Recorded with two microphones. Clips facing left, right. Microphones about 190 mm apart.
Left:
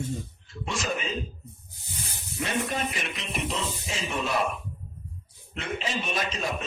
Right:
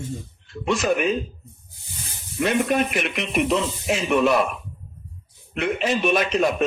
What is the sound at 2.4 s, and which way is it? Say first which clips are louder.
A man's voice: right 9 dB; 65° right (ahead or behind).